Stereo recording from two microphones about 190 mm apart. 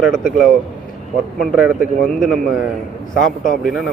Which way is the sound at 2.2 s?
Centre (ahead or behind).